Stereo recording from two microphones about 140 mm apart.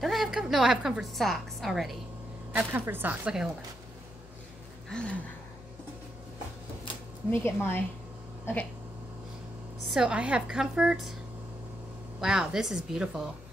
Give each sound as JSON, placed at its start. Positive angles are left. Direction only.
{"t": 0.0, "sound": "a woman's voice", "side_deg": 0}
{"t": 2.5, "sound": "speech", "side_deg": -15}
{"t": 4.8, "sound": "a sound", "side_deg": 5}
{"t": 7.2, "sound": "speech", "side_deg": 15}
{"t": 9.8, "sound": "a woman's voice", "side_deg": -5}
{"t": 12.2, "sound": "a woman's voice", "side_deg": -5}